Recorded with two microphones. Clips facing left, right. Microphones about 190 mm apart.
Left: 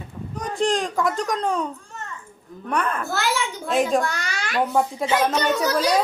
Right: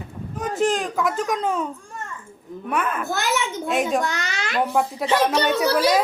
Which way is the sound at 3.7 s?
Centre (ahead or behind).